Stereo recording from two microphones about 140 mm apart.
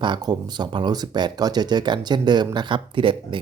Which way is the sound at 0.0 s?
30° right (ahead or behind).